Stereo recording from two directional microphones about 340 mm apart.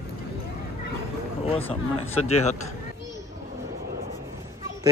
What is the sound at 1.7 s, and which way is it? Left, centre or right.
Speech, centre.